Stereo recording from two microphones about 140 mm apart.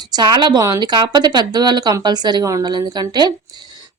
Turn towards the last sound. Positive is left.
turn(degrees=-30)  # may be behind; listen again after turning